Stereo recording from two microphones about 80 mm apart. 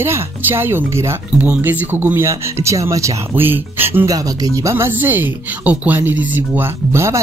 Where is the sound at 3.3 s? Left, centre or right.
Right.